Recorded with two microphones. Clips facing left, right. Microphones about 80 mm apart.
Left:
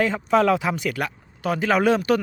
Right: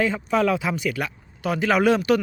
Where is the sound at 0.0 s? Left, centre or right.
Left.